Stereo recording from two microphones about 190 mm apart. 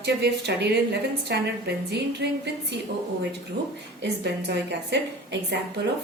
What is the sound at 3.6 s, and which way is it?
A woman's voice, 60° right (ahead or behind).